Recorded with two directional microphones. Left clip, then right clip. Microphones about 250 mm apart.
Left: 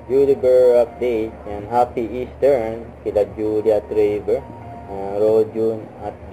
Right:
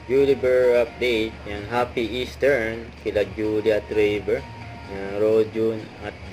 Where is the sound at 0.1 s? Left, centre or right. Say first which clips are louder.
Left 4 dB; right.